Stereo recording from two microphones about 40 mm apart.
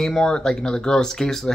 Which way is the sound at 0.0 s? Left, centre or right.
Centre.